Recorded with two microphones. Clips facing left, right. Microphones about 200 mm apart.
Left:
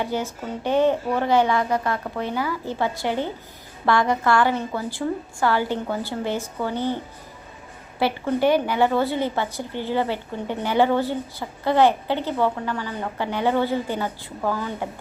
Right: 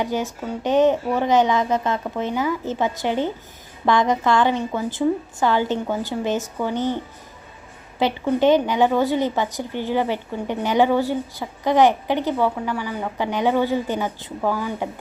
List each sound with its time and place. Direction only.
0.0 s a woman's voice: 15° right (ahead or behind)
7.9 s a woman's voice: 20° right (ahead or behind)